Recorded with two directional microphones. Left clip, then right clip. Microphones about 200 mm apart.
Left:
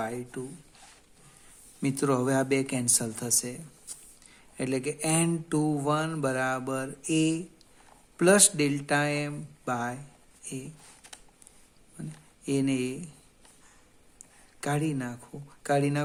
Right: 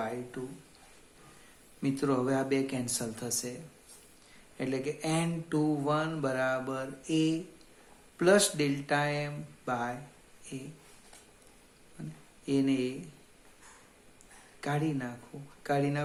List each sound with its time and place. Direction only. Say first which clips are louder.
0.0 s a sound: left 2 dB; 45° left (ahead or behind)
1.8 s mantra: left 3 dB; 50° left (ahead or behind)
4.5 s mantra: left 3 dB; 50° left (ahead or behind)
10.4 s speech: left 4 dB; 45° left (ahead or behind)
12.0 s mantra: left 3 dB; 50° left (ahead or behind)
14.6 s mantra: left 3 dB; 50° left (ahead or behind)